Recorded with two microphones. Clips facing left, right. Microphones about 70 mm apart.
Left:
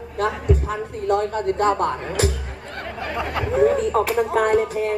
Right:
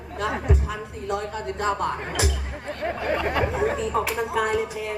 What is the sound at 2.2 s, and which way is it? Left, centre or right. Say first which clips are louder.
Music: left 4 dB; left.